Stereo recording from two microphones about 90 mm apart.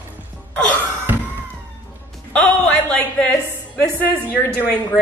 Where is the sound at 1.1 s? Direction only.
25° right (ahead or behind).